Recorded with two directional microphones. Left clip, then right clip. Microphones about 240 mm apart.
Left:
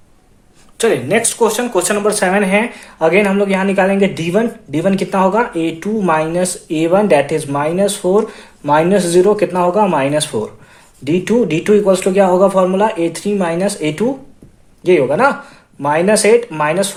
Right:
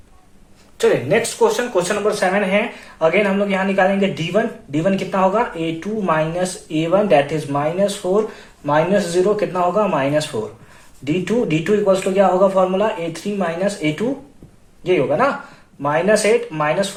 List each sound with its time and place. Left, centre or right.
0.8 s a man's voice: left